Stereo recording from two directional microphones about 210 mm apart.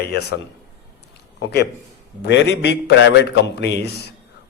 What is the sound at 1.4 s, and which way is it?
A man's voice, 50° left (ahead or behind).